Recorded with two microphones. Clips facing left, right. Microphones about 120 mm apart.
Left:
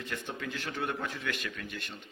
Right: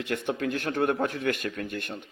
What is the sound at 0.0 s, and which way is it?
A man's voice, 65° right (ahead or behind).